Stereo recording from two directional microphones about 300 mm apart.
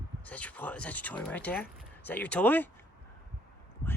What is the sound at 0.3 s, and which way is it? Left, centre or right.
Speech, centre.